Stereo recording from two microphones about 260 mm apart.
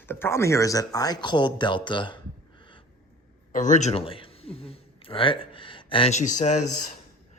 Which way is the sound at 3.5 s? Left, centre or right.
Left.